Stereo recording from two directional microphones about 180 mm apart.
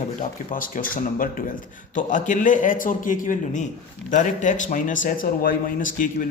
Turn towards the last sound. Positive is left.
turn(degrees=45)  # may be behind; listen again after turning